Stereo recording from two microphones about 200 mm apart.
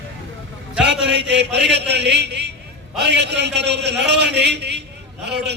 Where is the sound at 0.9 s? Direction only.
60° right (ahead or behind).